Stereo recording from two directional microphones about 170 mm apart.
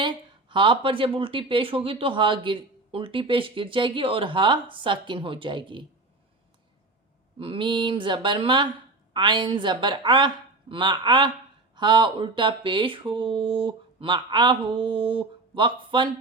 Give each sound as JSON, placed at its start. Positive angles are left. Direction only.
{"t": 0.0, "sound": "speech", "side_deg": -30}
{"t": 7.3, "sound": "speech", "side_deg": -30}